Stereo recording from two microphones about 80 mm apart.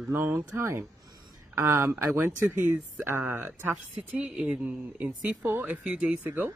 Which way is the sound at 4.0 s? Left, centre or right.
Centre.